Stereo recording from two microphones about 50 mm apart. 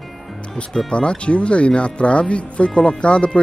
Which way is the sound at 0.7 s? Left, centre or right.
Centre.